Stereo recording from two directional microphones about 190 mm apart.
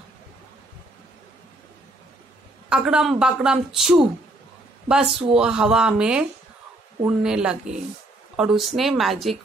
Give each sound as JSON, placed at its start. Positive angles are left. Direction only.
{"t": 2.7, "sound": "a woman's voice", "side_deg": -5}